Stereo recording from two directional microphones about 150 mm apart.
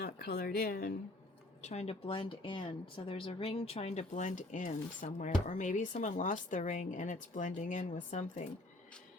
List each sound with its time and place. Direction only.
0.0 s speech: 90° left; by 0.9 s 65° left (ahead or behind)
1.6 s speech: 45° left (ahead or behind)